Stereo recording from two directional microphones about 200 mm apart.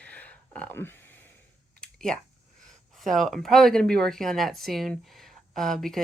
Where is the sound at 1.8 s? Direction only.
5° left (ahead or behind).